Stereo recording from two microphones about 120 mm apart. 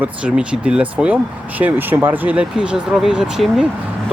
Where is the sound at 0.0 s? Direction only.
10° right (ahead or behind).